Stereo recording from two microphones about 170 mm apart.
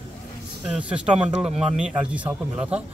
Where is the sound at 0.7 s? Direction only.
5° right (ahead or behind).